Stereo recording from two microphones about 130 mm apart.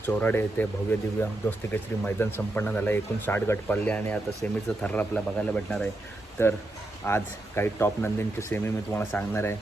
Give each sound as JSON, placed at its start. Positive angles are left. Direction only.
{"t": 0.1, "sound": "speech", "side_deg": 15}
{"t": 6.4, "sound": "speech", "side_deg": 20}